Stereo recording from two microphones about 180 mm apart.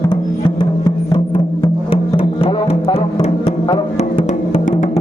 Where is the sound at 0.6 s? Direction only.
25° left (ahead or behind).